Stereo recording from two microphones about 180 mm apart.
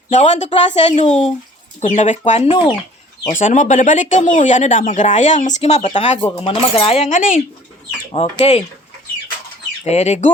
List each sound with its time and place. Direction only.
0.1 s speech: 40° left (ahead or behind)
9.8 s speech: 35° left (ahead or behind)